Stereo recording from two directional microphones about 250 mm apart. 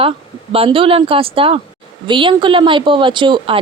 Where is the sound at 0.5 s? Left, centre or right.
Right.